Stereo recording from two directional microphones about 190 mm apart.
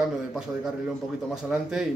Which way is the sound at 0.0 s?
Centre (ahead or behind).